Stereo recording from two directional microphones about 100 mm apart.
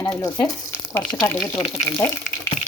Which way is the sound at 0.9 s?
20° left (ahead or behind).